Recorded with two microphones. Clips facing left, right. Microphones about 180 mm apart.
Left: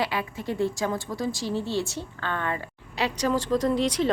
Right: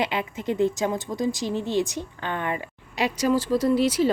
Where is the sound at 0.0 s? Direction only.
20° right (ahead or behind).